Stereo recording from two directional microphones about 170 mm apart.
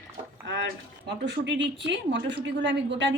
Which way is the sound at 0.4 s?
90° right.